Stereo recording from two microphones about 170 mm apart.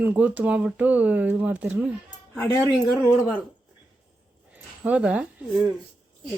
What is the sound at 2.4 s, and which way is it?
Speech, 20° left (ahead or behind).